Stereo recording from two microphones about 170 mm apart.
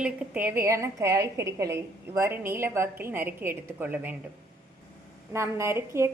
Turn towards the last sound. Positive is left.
turn(degrees=-15)  # may be behind; listen again after turning